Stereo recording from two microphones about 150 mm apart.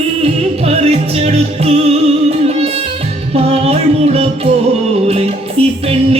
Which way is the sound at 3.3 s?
45° right (ahead or behind).